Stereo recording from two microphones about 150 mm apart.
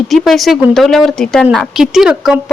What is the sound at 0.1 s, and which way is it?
A woman's voice, centre (ahead or behind).